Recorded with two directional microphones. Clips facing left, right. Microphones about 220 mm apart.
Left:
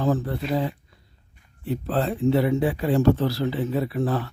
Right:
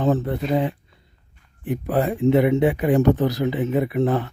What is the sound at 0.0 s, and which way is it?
Speech, 25° right (ahead or behind).